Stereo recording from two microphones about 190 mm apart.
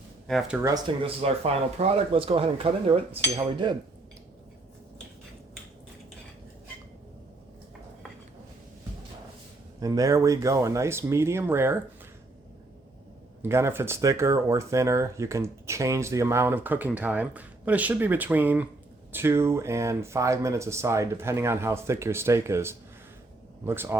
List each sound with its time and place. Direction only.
0.3 s speech: centre (ahead or behind)
0.6 s speech: 20° right (ahead or behind)
9.8 s speech: 20° right (ahead or behind)
13.4 s speech: 15° right (ahead or behind)